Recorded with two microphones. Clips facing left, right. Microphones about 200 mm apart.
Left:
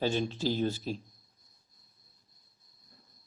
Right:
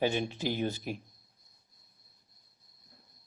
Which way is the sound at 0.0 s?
15° right (ahead or behind).